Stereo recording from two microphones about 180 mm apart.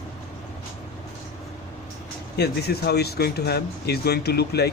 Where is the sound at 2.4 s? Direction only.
65° left (ahead or behind).